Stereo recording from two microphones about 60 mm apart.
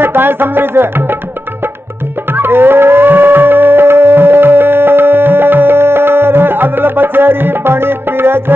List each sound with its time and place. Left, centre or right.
0.0 s music: right
2.3 s howl: right